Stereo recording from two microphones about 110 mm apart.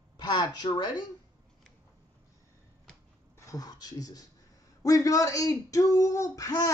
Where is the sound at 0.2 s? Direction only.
40° left (ahead or behind).